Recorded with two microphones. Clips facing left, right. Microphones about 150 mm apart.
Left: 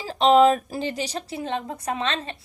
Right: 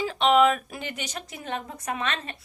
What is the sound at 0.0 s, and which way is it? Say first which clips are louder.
A woman's voice: left 4 dB; 35° left (ahead or behind).